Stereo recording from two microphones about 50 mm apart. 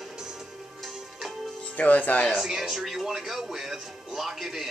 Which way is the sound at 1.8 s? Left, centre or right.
Left.